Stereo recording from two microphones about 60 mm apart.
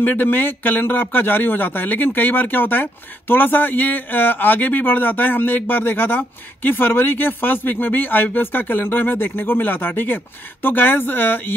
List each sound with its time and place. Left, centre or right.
0.0 s a man's voice: left